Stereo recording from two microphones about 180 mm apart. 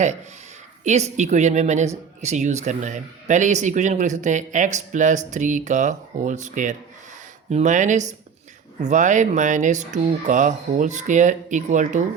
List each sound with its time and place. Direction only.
0.9 s a woman's voice: 40° right (ahead or behind)